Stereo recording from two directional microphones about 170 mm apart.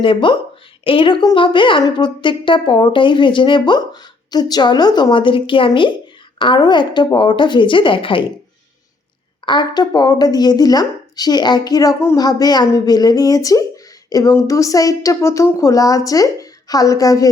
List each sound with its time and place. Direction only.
0.0 s a woman's voice: 30° left (ahead or behind)
9.5 s a woman's voice: 25° left (ahead or behind)